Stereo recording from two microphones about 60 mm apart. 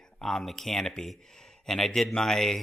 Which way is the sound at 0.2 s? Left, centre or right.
Centre.